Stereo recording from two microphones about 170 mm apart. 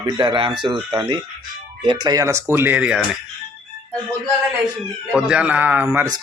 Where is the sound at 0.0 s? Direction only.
30° right (ahead or behind); by 3.0 s 10° right (ahead or behind).